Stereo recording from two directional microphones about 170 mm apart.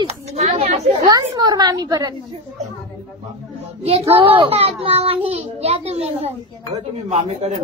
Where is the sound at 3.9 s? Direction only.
35° right (ahead or behind).